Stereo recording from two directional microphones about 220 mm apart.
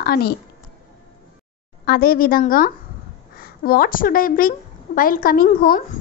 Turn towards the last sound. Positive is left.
turn(degrees=40)  # may be behind; listen again after turning